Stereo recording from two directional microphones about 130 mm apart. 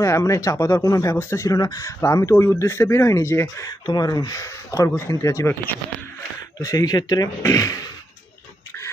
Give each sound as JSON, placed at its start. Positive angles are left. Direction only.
{"t": 0.0, "sound": "speech", "side_deg": 25}
{"t": 3.8, "sound": "speech", "side_deg": 30}